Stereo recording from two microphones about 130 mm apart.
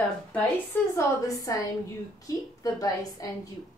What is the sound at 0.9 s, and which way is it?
A woman's voice, 25° left (ahead or behind).